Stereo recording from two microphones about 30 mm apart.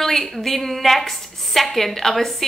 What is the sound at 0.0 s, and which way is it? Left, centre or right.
A woman's voice, centre.